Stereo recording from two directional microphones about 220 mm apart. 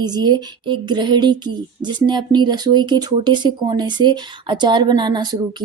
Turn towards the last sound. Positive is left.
turn(degrees=-20)  # may be behind; listen again after turning